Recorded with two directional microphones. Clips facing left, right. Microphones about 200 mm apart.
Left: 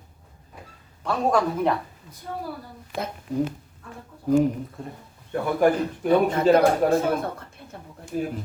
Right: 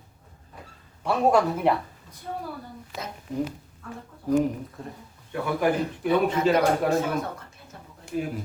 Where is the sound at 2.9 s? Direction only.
55° left (ahead or behind).